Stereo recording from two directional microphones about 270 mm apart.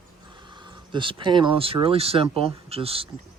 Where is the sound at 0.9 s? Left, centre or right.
Centre.